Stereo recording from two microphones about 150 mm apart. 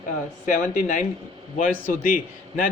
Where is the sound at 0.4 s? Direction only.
60° left (ahead or behind).